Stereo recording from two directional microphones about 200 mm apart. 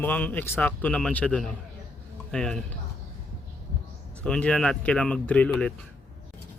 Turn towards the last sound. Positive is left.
turn(degrees=5)  # may be behind; listen again after turning